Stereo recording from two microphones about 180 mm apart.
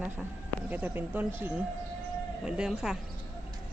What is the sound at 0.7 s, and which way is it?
Speech, 10° right (ahead or behind).